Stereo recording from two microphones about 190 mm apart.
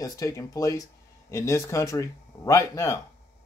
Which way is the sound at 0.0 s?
15° left (ahead or behind).